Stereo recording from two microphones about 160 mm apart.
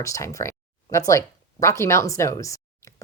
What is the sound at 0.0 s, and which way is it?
A woman's voice, 20° left (ahead or behind).